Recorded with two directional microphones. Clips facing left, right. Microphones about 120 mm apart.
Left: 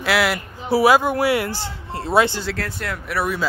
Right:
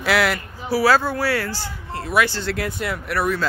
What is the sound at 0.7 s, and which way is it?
Speech, 20° left (ahead or behind).